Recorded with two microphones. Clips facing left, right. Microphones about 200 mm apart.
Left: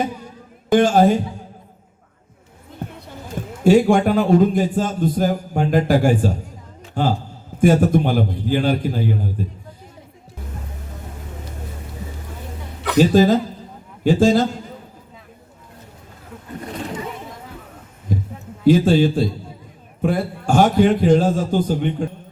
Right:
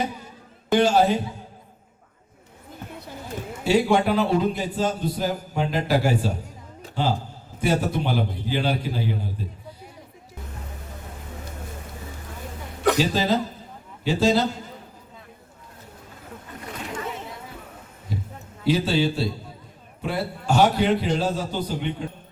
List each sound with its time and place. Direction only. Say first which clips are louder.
0.7 s a man's voice: left 5 dB; 50° left (ahead or behind)
3.6 s a man's voice: left 6 dB; 50° left (ahead or behind)
13.0 s a man's voice: left 8 dB; 50° left (ahead or behind)
18.1 s a sound: left 8 dB; 50° left (ahead or behind)
18.6 s a man's voice: left 8 dB; 50° left (ahead or behind)